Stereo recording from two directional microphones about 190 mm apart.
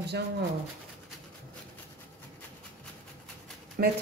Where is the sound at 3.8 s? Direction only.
55° right (ahead or behind).